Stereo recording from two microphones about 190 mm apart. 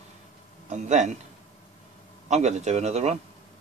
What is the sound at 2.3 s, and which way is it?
Speech, 35° right (ahead or behind).